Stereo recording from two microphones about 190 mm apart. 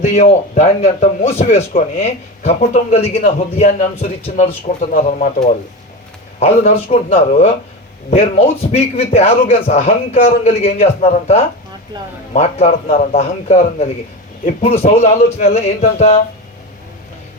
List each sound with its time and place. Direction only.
0.0 s a man's voice: 35° left (ahead or behind)
8.7 s a man's voice: 35° left (ahead or behind)